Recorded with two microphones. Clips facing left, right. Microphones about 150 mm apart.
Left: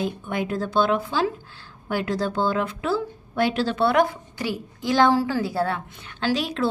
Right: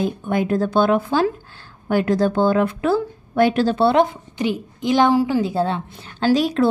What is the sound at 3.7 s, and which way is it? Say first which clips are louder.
A woman's voice: right 4 dB; 25° right (ahead or behind).